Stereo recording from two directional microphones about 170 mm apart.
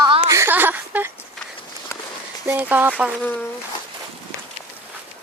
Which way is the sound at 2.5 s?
10° right (ahead or behind).